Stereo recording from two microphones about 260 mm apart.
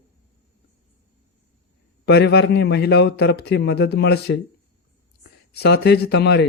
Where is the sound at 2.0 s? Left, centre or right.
Left.